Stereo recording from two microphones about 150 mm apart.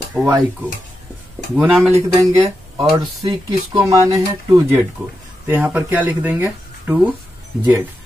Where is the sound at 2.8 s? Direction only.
35° right (ahead or behind).